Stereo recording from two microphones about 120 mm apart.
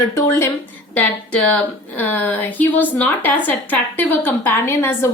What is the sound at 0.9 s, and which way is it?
Speech, 10° left (ahead or behind).